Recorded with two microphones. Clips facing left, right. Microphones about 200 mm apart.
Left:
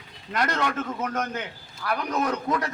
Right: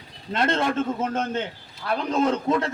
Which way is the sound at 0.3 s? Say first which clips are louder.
Right 4 dB; 25° right (ahead or behind).